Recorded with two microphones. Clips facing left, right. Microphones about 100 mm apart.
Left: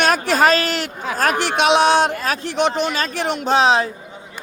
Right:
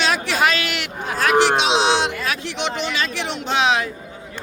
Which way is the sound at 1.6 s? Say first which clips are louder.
Left 4 dB; 55° left (ahead or behind).